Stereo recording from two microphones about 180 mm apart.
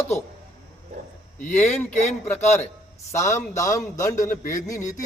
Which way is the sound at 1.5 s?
Centre (ahead or behind).